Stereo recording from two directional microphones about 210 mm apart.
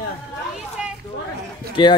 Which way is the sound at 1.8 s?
25° left (ahead or behind).